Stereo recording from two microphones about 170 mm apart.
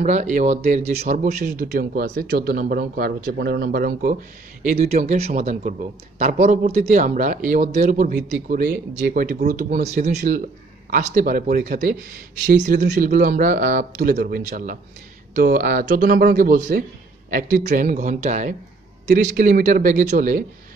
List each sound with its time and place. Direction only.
0.0 s speech: 45° right (ahead or behind)
4.6 s speech: 45° right (ahead or behind)
10.9 s speech: 60° right (ahead or behind)
12.4 s speech: 75° right (ahead or behind)
12.9 s speech: 55° right (ahead or behind)